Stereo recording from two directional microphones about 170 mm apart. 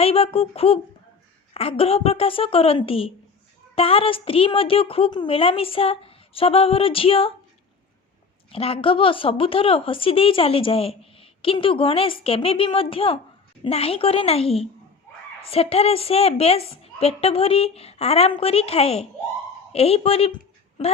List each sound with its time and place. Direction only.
0.0 s a woman's voice: 35° left (ahead or behind)
8.4 s a woman's voice: 35° left (ahead or behind)